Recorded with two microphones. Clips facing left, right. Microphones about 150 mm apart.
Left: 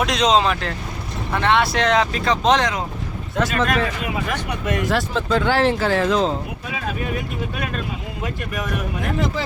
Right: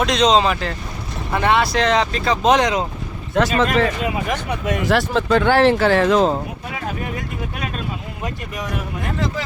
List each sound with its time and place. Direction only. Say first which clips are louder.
0.0 s speech: right 2 dB; 5° left (ahead or behind)
3.3 s speech: right 4 dB; 90° right
4.9 s speech: right 6 dB; 70° right (ahead or behind)